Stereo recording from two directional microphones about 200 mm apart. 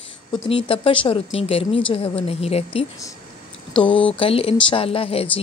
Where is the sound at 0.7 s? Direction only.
25° left (ahead or behind).